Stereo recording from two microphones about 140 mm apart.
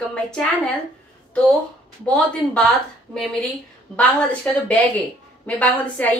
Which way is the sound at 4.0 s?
10° left (ahead or behind).